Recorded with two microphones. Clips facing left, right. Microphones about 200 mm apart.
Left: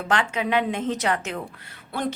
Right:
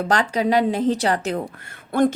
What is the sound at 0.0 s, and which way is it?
Speech, 40° right (ahead or behind).